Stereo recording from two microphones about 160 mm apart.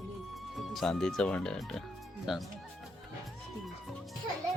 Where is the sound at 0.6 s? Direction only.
Centre (ahead or behind).